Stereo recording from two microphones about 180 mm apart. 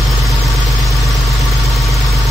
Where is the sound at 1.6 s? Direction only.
Centre (ahead or behind).